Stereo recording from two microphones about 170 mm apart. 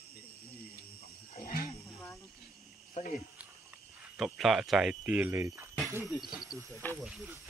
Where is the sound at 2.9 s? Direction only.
40° left (ahead or behind).